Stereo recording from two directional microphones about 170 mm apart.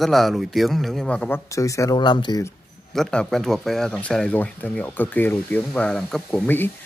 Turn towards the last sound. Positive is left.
turn(degrees=10)  # may be behind; listen again after turning